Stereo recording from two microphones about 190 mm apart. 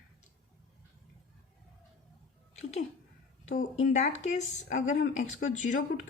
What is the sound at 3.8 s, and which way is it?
Speech, 40° left (ahead or behind).